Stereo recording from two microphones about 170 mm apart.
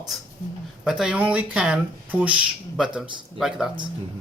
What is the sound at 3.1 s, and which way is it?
Speech, 30° right (ahead or behind).